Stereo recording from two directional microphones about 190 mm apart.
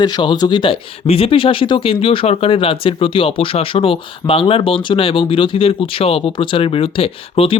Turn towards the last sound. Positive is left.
turn(degrees=30)  # may be behind; listen again after turning